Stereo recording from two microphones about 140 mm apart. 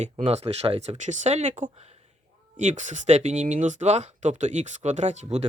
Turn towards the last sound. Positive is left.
turn(degrees=-55)  # may be behind; listen again after turning